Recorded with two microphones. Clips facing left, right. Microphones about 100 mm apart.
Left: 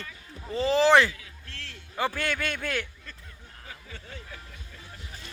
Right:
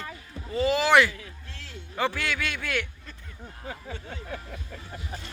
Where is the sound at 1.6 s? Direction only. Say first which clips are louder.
Right 1 dB; 10° right (ahead or behind).